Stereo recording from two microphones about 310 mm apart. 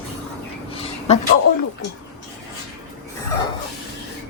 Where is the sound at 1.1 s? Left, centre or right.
Centre.